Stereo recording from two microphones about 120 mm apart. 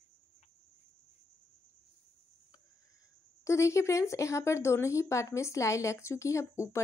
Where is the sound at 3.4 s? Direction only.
25° left (ahead or behind).